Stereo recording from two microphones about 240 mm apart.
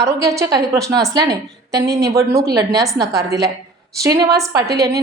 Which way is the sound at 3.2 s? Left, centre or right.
Right.